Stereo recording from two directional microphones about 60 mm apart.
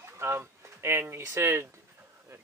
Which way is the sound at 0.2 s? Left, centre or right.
Right.